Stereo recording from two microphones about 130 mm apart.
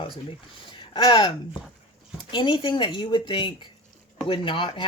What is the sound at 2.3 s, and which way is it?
Speech, 40° left (ahead or behind).